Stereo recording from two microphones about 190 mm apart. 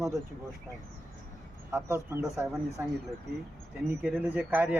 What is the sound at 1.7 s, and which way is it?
Speech, 10° right (ahead or behind).